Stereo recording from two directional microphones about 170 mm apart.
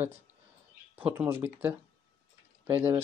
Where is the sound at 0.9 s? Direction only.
10° right (ahead or behind).